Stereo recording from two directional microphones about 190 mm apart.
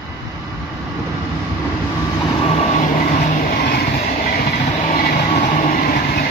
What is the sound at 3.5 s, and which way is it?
Train, 55° left (ahead or behind).